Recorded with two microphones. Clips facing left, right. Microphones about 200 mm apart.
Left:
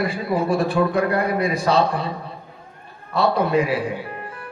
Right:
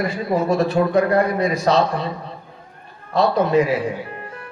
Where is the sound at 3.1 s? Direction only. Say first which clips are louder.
Right 2 dB; 30° left (ahead or behind).